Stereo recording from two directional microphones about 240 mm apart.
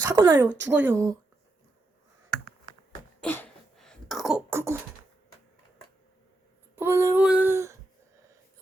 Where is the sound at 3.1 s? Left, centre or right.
Centre.